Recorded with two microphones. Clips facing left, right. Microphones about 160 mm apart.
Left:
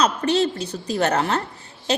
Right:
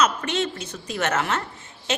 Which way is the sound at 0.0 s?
35° left (ahead or behind).